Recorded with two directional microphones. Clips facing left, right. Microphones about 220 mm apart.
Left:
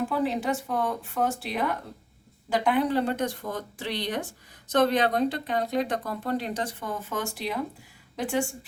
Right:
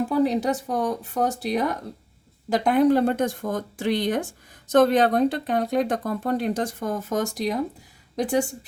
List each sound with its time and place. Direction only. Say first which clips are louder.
0.2 s speech: right 5 dB; 40° right (ahead or behind)